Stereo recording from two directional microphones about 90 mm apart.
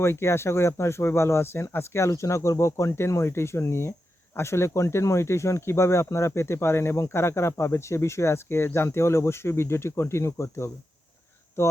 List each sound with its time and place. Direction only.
0.0 s speech: 30° left (ahead or behind)